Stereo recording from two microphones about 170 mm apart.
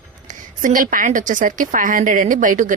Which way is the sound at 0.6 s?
50° right (ahead or behind).